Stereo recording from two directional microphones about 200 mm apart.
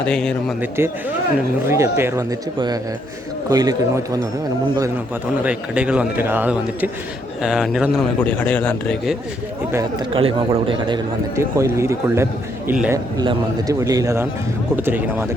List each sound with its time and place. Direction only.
0.0 s a man's voice: 5° left (ahead or behind)
0.8 s a man's voice: 10° right (ahead or behind)
3.5 s a man's voice: 20° right (ahead or behind)
5.4 s a man's voice: 5° right (ahead or behind)
10.1 s a man's voice: 25° right (ahead or behind); by 13.0 s 10° right (ahead or behind)
13.1 s a man's voice: 20° right (ahead or behind)